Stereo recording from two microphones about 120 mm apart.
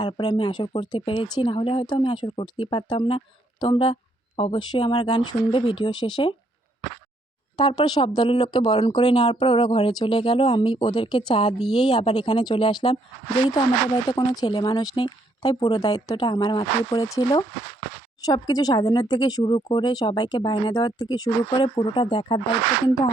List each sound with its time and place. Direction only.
0.0 s speech: 45° left (ahead or behind)
4.4 s speech: 50° left (ahead or behind)
4.7 s speech: 40° left (ahead or behind)
7.5 s speech: 40° left (ahead or behind)
14.2 s speech: 35° left (ahead or behind)